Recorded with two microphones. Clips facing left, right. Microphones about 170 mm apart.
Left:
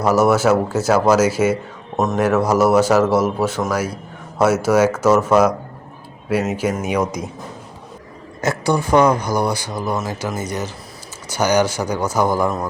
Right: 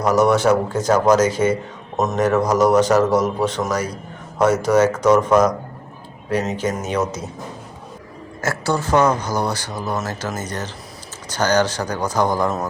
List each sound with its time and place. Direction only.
0.0 s speech: 5° left (ahead or behind)
8.4 s speech: 15° left (ahead or behind)